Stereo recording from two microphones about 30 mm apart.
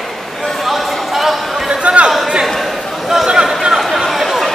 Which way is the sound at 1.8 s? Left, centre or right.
Right.